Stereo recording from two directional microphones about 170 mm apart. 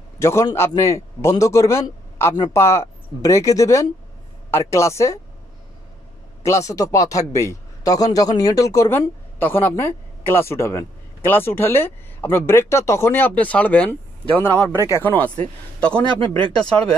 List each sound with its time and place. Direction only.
0.2 s speech: 15° left (ahead or behind)
6.4 s speech: 20° left (ahead or behind)
16.2 s speech: 30° right (ahead or behind)
16.5 s speech: 5° left (ahead or behind)